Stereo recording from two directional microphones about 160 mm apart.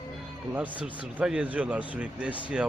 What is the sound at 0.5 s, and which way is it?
Speech, 10° right (ahead or behind).